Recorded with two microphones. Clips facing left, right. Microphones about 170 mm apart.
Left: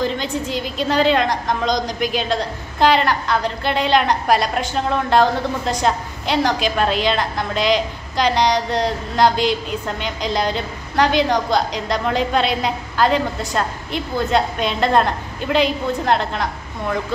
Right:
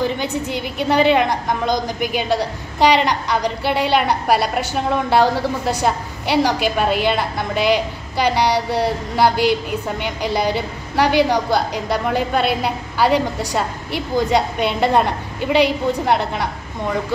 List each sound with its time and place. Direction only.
0.0 s a woman's voice: 10° right (ahead or behind)
0.5 s a woman's voice: 65° right (ahead or behind)
1.1 s a woman's voice: 10° right (ahead or behind)